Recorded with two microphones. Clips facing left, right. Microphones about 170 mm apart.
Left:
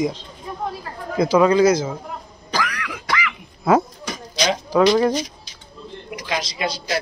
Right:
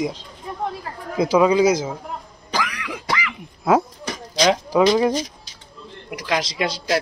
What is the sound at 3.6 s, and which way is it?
Speech, 5° right (ahead or behind).